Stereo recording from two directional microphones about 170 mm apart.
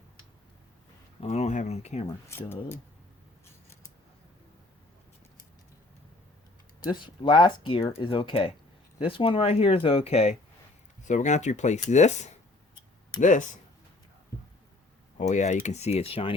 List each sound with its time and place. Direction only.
1.2 s speech: 40° left (ahead or behind)
2.3 s speech: 15° left (ahead or behind)
6.9 s speech: 25° left (ahead or behind); by 13.4 s 50° left (ahead or behind)
15.2 s speech: 45° left (ahead or behind)